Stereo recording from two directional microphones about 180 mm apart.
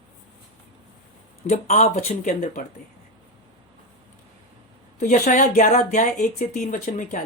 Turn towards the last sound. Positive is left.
turn(degrees=45)  # may be behind; listen again after turning